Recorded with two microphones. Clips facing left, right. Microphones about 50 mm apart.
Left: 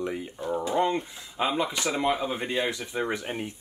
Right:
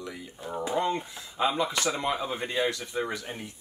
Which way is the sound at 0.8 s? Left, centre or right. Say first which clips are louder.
Left 3 dB; centre.